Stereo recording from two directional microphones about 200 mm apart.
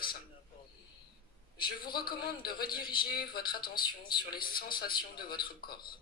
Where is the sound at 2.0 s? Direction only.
50° left (ahead or behind).